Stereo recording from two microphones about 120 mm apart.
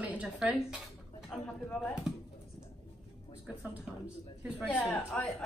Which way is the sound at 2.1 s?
5° right (ahead or behind).